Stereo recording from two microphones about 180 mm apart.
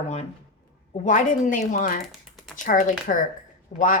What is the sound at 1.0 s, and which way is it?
Speech, 45° left (ahead or behind).